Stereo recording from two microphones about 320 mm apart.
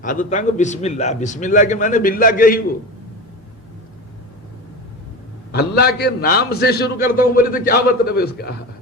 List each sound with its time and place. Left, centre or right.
0.0 s a man's voice: left
5.5 s a man's voice: left